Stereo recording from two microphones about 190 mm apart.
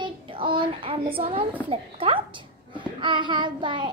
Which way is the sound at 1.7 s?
30° right (ahead or behind).